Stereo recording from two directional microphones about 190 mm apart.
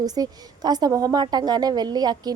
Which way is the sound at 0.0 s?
20° right (ahead or behind).